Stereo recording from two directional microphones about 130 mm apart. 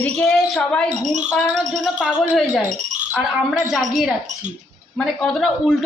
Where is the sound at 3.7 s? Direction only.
Centre (ahead or behind).